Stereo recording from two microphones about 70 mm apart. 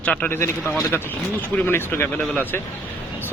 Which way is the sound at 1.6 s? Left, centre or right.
Left.